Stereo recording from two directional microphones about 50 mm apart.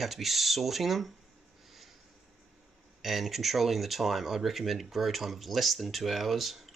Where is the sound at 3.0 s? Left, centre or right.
Centre.